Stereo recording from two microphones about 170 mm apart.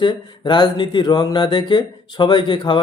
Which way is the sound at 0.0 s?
25° left (ahead or behind).